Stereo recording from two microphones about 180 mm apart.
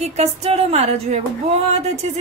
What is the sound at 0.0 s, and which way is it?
A woman's voice, 40° right (ahead or behind).